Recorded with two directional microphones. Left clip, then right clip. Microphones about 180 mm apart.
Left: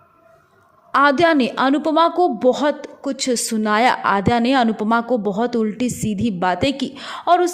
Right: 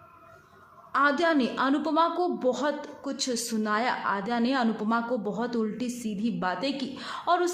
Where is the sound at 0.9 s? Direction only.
45° left (ahead or behind).